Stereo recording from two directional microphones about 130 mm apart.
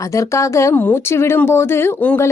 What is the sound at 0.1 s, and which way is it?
Speech, 25° left (ahead or behind).